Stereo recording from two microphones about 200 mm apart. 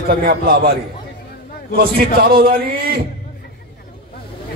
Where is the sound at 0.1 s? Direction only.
50° right (ahead or behind).